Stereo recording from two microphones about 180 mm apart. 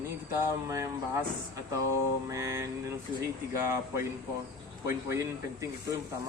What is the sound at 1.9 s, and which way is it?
Speech, 15° right (ahead or behind).